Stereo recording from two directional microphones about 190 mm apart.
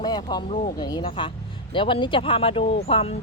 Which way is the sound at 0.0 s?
20° left (ahead or behind).